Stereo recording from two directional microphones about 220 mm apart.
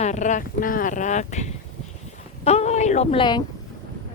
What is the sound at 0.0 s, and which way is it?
A woman's voice, 35° left (ahead or behind).